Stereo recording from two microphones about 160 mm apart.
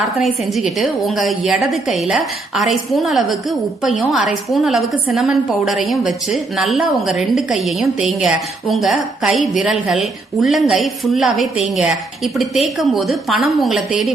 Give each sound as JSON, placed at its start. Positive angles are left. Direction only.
{"t": 0.0, "sound": "a woman's voice", "side_deg": 0}